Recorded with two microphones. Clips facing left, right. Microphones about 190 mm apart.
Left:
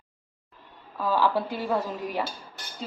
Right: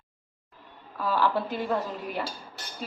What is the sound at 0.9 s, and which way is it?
A woman's voice, 15° left (ahead or behind).